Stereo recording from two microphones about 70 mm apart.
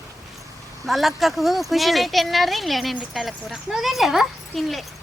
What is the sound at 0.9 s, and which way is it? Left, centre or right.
Speech, centre.